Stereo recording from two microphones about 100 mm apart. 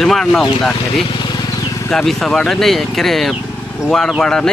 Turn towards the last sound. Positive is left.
turn(degrees=5)  # may be behind; listen again after turning